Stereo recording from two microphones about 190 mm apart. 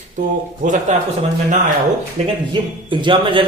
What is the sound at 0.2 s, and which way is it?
Speech, 40° right (ahead or behind).